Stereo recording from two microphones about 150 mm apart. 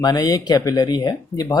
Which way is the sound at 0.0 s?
25° left (ahead or behind).